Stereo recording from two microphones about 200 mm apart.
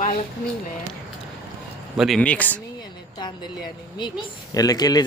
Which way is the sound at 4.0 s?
20° left (ahead or behind).